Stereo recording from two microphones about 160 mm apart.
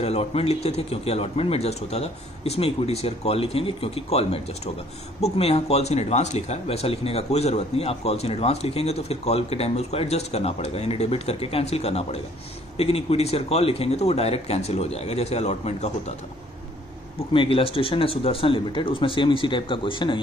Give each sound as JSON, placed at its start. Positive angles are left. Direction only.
{"t": 0.0, "sound": "speech", "side_deg": 40}
{"t": 17.3, "sound": "speech", "side_deg": 35}